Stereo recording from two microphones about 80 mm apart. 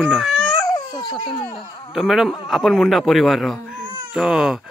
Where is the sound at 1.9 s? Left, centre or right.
Centre.